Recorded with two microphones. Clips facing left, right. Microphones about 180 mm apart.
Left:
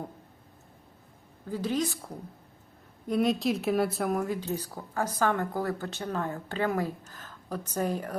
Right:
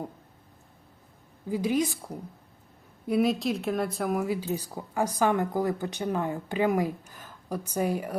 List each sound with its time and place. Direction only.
1.5 s speech: 10° right (ahead or behind)